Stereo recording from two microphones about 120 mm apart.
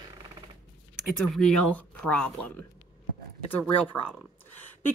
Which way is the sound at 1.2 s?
5° left (ahead or behind).